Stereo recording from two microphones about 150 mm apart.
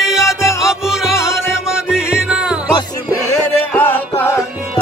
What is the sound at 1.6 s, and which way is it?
Music, 5° right (ahead or behind).